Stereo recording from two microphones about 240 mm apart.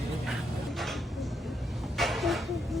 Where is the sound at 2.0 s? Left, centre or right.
Centre.